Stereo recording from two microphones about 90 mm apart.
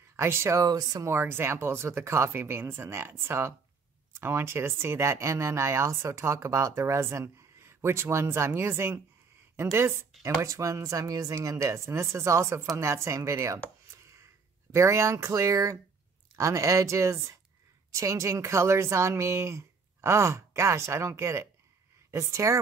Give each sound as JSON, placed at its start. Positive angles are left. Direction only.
{"t": 0.1, "sound": "speech", "side_deg": -30}
{"t": 1.0, "sound": "speech", "side_deg": -25}
{"t": 14.7, "sound": "speech", "side_deg": -35}